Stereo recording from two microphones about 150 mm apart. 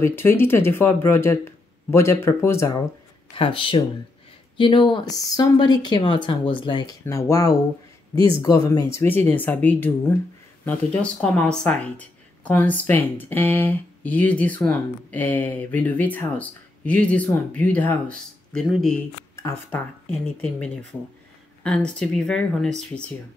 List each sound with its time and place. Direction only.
0.0 s speech: 15° left (ahead or behind)
3.3 s speech: 35° left (ahead or behind)
7.1 s speech: 20° left (ahead or behind); by 22.7 s 5° left (ahead or behind)